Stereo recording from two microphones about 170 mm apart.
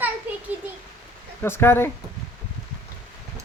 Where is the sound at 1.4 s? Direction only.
15° left (ahead or behind).